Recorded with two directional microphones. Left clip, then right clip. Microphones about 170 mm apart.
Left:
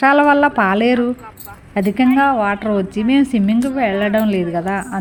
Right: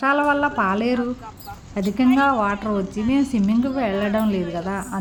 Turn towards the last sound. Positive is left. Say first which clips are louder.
# left 6 dB
turn(degrees=20)  # may be behind; listen again after turning